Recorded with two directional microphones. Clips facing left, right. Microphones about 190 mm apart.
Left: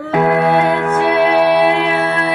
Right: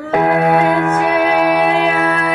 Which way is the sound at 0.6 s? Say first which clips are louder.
Even; 30° left (ahead or behind).